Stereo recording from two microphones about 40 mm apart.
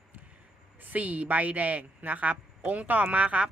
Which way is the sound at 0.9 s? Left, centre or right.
Right.